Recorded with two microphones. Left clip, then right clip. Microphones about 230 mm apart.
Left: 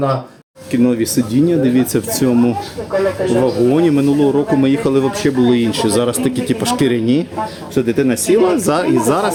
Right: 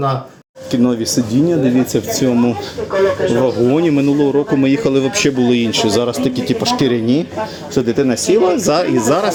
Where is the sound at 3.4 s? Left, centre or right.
Centre.